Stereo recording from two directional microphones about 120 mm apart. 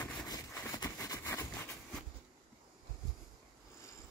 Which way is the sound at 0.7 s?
30° left (ahead or behind).